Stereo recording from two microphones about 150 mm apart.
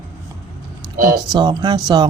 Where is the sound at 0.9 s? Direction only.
70° right (ahead or behind).